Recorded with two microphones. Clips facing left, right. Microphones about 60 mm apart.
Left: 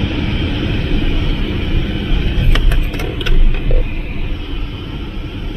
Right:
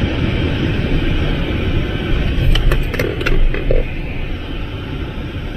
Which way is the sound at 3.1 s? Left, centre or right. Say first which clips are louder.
Right 3 dB; right.